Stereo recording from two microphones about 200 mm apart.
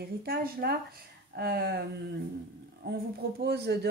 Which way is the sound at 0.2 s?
50° right (ahead or behind).